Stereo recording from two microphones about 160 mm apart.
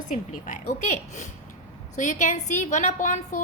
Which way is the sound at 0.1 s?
50° left (ahead or behind).